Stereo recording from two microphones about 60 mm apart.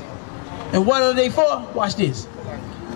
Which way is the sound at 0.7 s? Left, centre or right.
Centre.